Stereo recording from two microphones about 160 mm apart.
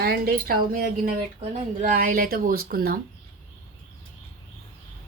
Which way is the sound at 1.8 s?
55° right (ahead or behind).